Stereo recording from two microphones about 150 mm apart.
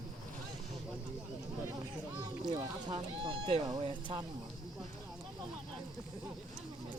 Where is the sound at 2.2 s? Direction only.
25° right (ahead or behind).